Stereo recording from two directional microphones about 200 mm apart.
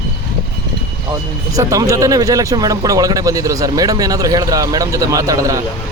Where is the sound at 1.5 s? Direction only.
15° right (ahead or behind).